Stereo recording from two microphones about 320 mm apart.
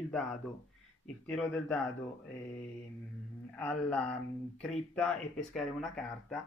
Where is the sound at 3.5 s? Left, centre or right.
Centre.